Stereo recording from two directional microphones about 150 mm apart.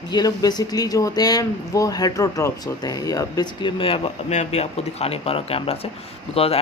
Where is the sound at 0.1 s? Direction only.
25° left (ahead or behind).